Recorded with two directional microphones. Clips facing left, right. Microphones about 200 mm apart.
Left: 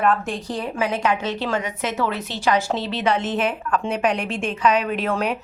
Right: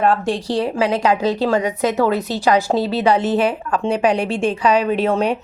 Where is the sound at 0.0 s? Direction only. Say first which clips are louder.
Right 4 dB; 30° right (ahead or behind).